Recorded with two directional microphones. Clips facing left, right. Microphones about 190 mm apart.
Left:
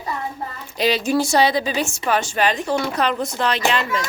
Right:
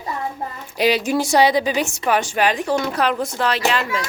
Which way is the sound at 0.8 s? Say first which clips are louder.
Right 1 dB; 10° right (ahead or behind).